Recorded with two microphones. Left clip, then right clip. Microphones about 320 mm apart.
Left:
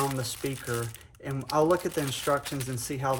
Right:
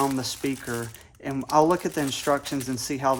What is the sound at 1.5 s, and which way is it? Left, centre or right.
Speech, right.